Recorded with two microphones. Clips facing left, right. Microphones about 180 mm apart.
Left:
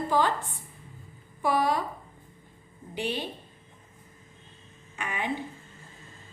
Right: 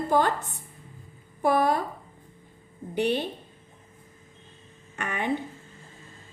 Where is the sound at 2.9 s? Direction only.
60° right (ahead or behind).